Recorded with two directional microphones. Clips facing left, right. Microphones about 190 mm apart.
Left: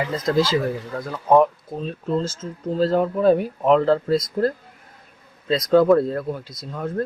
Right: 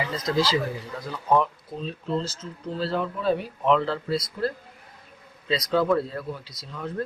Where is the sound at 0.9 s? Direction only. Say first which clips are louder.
Left 6 dB; 50° left (ahead or behind).